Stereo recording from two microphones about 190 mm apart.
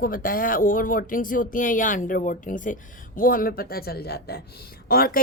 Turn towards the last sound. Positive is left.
turn(degrees=50)  # may be behind; listen again after turning